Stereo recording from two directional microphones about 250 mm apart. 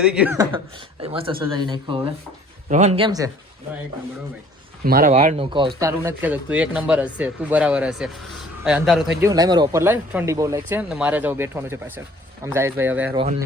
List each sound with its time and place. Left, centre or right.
0.0 s speech: centre
1.0 s speech: right
4.9 s speech: right; by 9.3 s centre
9.3 s speech: centre